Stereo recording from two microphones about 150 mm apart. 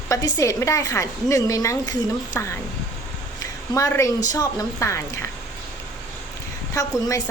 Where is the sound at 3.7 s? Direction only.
20° left (ahead or behind).